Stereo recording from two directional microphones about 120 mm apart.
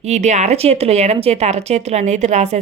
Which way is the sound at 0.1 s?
75° right (ahead or behind).